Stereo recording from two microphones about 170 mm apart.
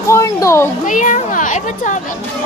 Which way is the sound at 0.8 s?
50° left (ahead or behind).